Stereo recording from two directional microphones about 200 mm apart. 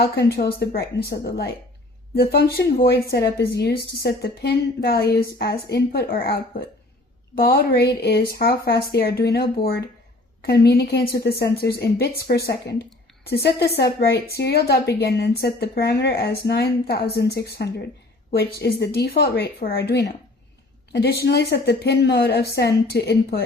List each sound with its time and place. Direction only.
0.0 s a woman's voice: 50° left (ahead or behind)